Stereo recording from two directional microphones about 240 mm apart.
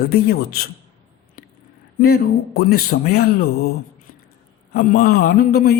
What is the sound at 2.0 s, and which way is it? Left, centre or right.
A man's voice, left.